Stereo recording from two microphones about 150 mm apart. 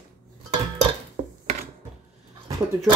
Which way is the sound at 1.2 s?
65° right (ahead or behind).